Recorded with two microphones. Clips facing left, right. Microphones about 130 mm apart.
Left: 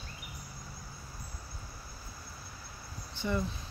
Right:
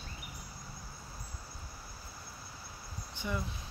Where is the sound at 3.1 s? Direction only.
10° right (ahead or behind).